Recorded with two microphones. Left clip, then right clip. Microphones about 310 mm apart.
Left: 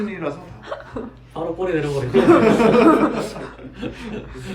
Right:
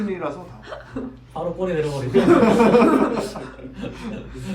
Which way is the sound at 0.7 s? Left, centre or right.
Left.